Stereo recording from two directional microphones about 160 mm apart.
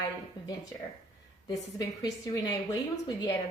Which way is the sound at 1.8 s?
20° left (ahead or behind).